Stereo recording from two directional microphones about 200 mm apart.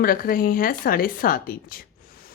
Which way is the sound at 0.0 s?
45° left (ahead or behind).